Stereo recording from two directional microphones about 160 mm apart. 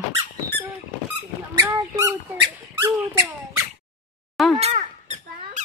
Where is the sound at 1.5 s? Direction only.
20° right (ahead or behind).